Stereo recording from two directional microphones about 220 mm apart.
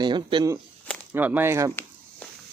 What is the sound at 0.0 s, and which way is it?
Speech, 20° right (ahead or behind).